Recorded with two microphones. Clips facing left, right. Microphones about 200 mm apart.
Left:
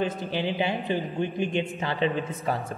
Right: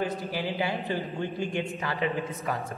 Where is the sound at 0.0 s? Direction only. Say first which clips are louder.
Left 3 dB; 20° left (ahead or behind).